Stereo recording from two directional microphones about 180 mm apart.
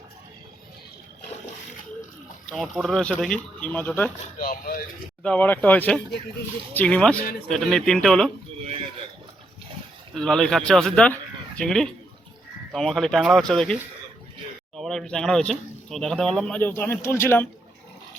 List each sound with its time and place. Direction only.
2.5 s speech: centre (ahead or behind)
4.4 s speech: 50° left (ahead or behind)
5.2 s speech: 10° left (ahead or behind)
10.2 s speech: 5° left (ahead or behind)
14.8 s speech: centre (ahead or behind)